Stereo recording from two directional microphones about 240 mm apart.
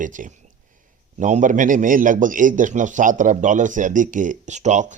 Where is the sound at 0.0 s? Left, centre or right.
Right.